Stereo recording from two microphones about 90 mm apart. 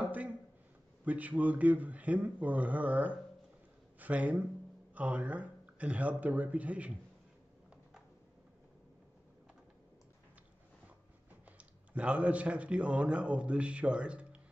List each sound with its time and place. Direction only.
0.0 s a sound: 15° right (ahead or behind)
1.0 s a man's voice: 15° right (ahead or behind)
11.5 s speech: 15° right (ahead or behind)